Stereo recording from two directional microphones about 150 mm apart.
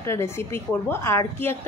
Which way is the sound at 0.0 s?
20° left (ahead or behind).